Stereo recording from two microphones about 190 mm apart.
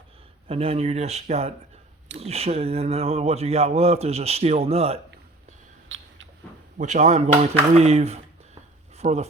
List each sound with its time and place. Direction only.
0.4 s speech: 30° right (ahead or behind)
5.9 s mouse: 80° right
6.7 s speech: 40° right (ahead or behind)